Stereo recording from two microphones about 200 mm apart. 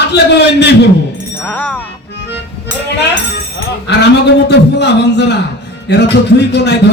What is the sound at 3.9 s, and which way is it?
A man's voice, 55° left (ahead or behind).